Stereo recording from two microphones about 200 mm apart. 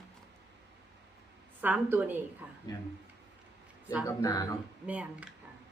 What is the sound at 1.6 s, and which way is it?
Speech, 10° right (ahead or behind).